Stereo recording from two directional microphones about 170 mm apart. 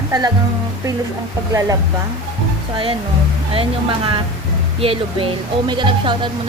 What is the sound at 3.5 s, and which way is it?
Speech, 35° right (ahead or behind).